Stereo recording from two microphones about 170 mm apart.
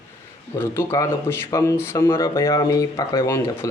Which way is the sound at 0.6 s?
15° left (ahead or behind).